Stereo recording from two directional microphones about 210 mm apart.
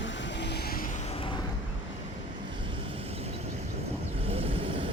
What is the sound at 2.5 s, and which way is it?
Vehicle, 25° right (ahead or behind).